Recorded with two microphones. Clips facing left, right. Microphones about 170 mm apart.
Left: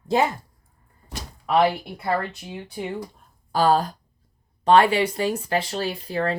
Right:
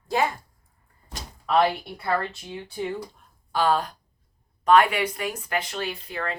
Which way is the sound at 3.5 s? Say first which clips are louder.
Left 3 dB; 40° left (ahead or behind).